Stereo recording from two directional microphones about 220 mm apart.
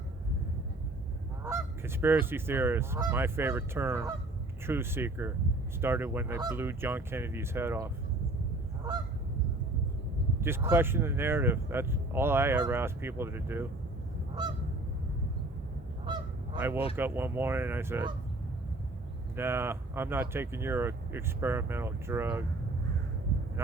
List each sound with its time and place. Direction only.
1.5 s goose: 10° right (ahead or behind)
4.6 s speech: 10° right (ahead or behind)
10.4 s speech: 10° right (ahead or behind)
16.1 s goose: 20° right (ahead or behind)
16.9 s speech: 10° right (ahead or behind)
19.4 s speech: 10° right (ahead or behind)